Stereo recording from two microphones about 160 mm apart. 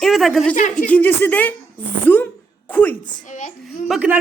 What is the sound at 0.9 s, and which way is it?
Speech, 10° left (ahead or behind).